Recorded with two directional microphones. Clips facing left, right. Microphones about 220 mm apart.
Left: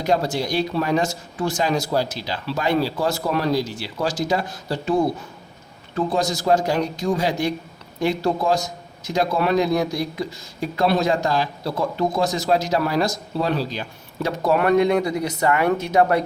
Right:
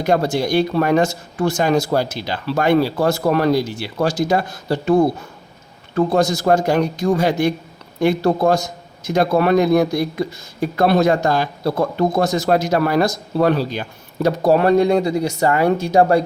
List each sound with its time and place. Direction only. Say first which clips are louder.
0.0 s speech: right 4 dB; 55° right (ahead or behind)
6.1 s speech: right 3 dB; 60° right (ahead or behind)
14.2 s speech: right 5 dB; 35° right (ahead or behind)